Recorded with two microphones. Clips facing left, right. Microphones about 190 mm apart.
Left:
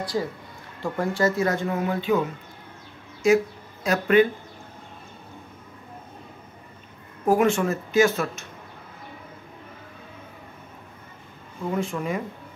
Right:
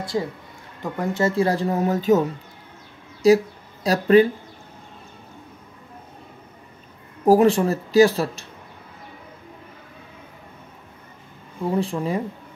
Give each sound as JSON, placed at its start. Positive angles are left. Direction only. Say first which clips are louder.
{"t": 0.0, "sound": "speech", "louder": "right 2 dB", "side_deg": -25}
{"t": 3.2, "sound": "speech", "louder": "right 4 dB", "side_deg": -35}
{"t": 7.2, "sound": "speech", "louder": "right 5 dB", "side_deg": -35}
{"t": 11.7, "sound": "speech", "louder": "right 3 dB", "side_deg": -35}